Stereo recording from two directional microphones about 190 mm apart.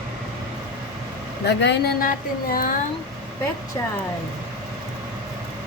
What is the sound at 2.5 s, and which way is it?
Speech, 45° left (ahead or behind).